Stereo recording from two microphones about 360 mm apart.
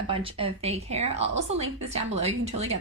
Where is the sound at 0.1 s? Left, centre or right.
Centre.